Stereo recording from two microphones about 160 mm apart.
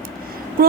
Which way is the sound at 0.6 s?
65° right (ahead or behind).